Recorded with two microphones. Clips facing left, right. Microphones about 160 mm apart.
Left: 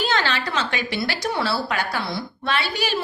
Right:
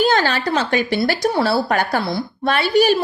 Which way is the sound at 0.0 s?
45° right (ahead or behind).